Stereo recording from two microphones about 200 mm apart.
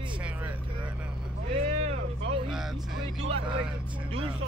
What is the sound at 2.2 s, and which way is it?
Speech, 60° right (ahead or behind).